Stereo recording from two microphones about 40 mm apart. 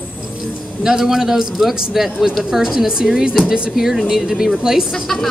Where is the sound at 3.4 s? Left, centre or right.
Right.